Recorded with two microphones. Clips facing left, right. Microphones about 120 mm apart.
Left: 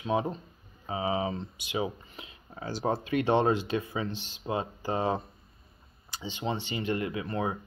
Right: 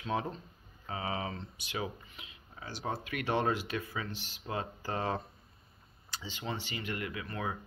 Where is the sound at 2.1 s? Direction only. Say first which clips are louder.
Left 6 dB; 35° left (ahead or behind).